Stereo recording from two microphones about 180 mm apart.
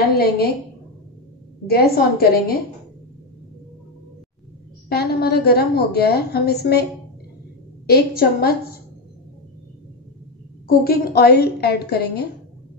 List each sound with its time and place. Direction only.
0.0 s a woman's voice: 60° left (ahead or behind)
1.7 s a woman's voice: 60° left (ahead or behind)
4.8 s a woman's voice: 60° left (ahead or behind)
10.7 s a woman's voice: 55° left (ahead or behind)